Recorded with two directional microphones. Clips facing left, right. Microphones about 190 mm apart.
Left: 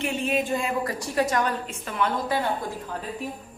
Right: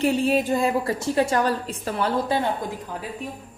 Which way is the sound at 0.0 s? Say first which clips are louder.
Right 5 dB; 35° right (ahead or behind).